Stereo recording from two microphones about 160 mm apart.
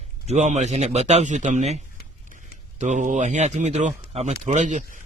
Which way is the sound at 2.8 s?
50° right (ahead or behind).